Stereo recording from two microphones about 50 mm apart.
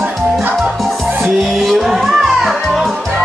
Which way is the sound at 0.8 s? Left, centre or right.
Centre.